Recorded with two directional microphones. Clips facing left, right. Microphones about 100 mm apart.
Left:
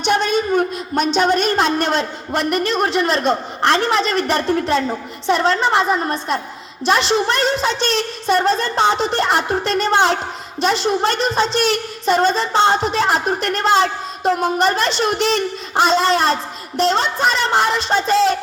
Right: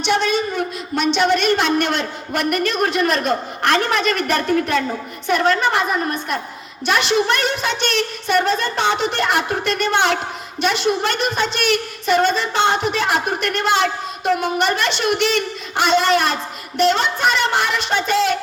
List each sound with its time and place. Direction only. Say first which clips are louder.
0.0 s a woman's voice: left 1 dB; 45° left (ahead or behind)